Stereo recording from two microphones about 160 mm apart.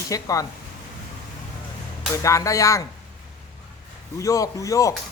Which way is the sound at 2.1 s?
20° left (ahead or behind).